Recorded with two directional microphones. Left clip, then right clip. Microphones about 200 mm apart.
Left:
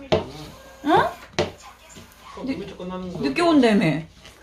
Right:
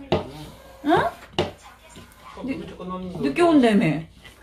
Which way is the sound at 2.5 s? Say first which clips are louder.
Left 1 dB; 20° left (ahead or behind).